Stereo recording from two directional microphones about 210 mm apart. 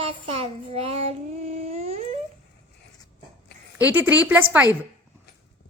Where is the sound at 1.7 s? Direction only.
30° right (ahead or behind).